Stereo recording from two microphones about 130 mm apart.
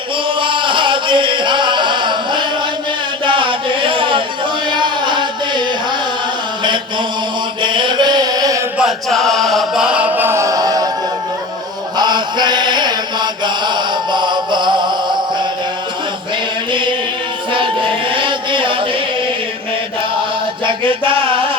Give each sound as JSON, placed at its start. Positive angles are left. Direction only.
{"t": 0.3, "sound": "music", "side_deg": -40}
{"t": 3.2, "sound": "a sound", "side_deg": -40}
{"t": 7.6, "sound": "music", "side_deg": -35}
{"t": 8.8, "sound": "chant", "side_deg": 0}
{"t": 11.9, "sound": "chant", "side_deg": -35}
{"t": 17.5, "sound": "chant", "side_deg": -40}
{"t": 20.7, "sound": "a sound", "side_deg": -40}